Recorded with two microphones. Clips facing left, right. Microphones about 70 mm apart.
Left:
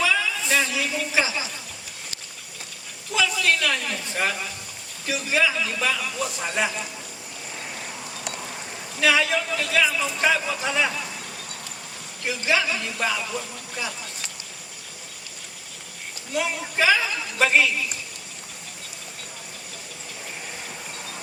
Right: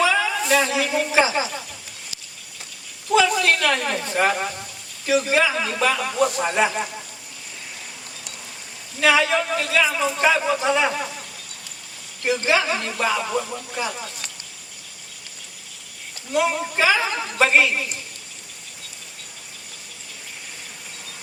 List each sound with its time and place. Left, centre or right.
0.0 s a sound: right
0.4 s speech: right
3.1 s a man's voice: right
6.4 s a man's voice: right
9.0 s a man's voice: right
12.2 s speech: right
16.3 s a man's voice: right
17.0 s speech: right